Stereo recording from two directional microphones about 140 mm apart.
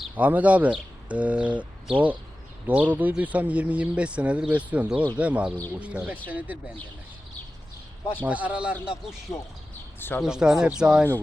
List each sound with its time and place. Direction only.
0.2 s speech: 10° right (ahead or behind)
8.2 s speech: 10° right (ahead or behind)
10.2 s speech: 5° right (ahead or behind)